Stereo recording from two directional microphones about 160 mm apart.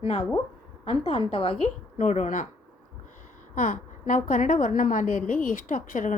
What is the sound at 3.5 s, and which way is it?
A woman's voice, 55° left (ahead or behind).